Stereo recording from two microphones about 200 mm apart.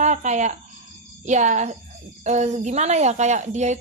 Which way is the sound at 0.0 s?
35° right (ahead or behind).